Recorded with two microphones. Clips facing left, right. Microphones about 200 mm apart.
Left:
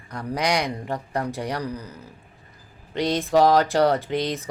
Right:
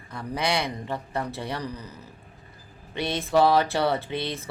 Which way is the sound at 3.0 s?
15° left (ahead or behind).